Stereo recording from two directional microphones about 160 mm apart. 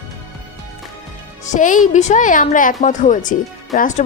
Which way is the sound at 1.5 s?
55° left (ahead or behind).